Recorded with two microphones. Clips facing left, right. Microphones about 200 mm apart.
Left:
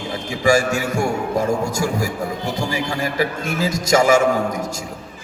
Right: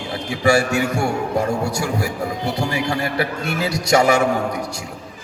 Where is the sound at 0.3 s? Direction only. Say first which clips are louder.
Even; 40° left (ahead or behind).